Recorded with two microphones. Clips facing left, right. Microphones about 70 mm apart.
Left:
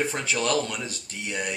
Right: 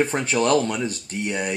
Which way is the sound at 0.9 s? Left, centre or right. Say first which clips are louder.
Right 7 dB; right.